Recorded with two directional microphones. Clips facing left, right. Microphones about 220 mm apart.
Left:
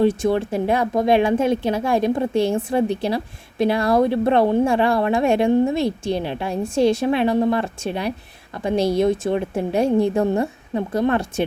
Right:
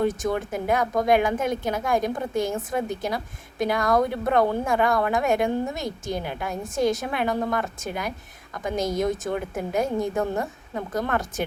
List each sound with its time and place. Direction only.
0.0 s speech: 30° left (ahead or behind)